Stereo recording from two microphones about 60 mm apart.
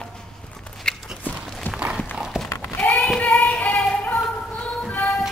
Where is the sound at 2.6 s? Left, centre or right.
Left.